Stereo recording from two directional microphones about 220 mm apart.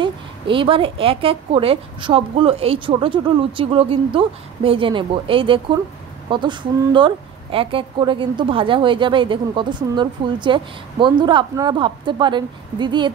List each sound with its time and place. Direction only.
0.0 s speech: 25° right (ahead or behind)